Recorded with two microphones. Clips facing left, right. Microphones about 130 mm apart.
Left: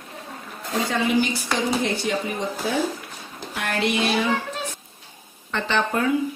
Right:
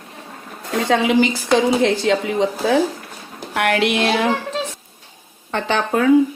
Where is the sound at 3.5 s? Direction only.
80° right.